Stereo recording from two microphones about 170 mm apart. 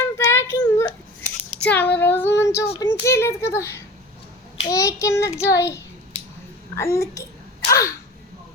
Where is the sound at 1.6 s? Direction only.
10° left (ahead or behind).